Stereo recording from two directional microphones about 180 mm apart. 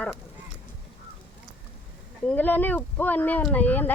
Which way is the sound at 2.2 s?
10° left (ahead or behind).